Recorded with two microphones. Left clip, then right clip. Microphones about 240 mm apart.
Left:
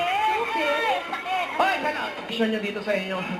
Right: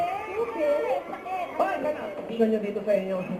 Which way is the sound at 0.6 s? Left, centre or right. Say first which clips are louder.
Left 1 dB; centre.